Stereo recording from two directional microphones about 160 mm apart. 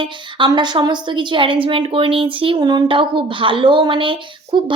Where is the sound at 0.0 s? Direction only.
30° right (ahead or behind).